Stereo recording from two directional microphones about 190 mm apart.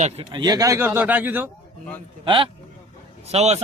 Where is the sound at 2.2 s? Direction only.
25° right (ahead or behind).